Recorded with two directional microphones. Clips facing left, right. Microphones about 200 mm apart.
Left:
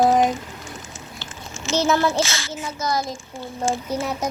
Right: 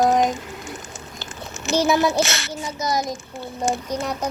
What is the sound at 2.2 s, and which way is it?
Speech, 65° right (ahead or behind).